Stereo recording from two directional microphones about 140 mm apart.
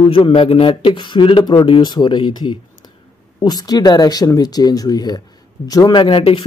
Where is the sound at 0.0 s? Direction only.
40° left (ahead or behind).